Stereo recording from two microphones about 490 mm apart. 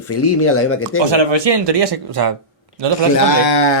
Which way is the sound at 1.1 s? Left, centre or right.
Right.